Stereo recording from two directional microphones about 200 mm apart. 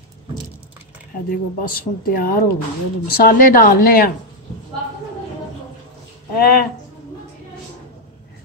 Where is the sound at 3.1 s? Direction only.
45° left (ahead or behind).